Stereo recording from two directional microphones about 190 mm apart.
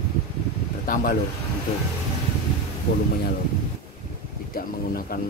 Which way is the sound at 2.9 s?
60° left (ahead or behind).